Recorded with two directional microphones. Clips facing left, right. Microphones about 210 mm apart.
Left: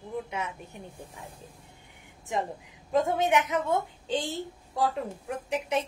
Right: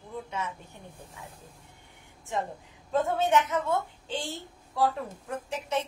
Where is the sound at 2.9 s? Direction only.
15° left (ahead or behind).